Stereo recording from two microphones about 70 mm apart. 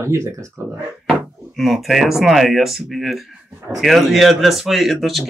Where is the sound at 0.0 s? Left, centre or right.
Right.